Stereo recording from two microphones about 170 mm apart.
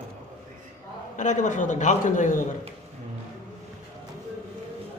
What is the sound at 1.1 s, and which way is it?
A man's voice, 45° left (ahead or behind).